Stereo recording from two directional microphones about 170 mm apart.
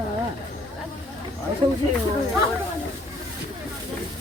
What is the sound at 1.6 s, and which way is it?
Speech, 30° right (ahead or behind).